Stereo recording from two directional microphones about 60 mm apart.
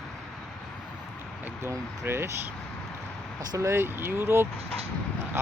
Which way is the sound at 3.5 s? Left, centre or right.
Right.